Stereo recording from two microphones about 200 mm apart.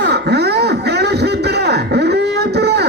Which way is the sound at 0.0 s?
55° right (ahead or behind).